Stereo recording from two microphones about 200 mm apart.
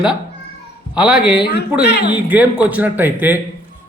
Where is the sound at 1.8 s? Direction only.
55° left (ahead or behind).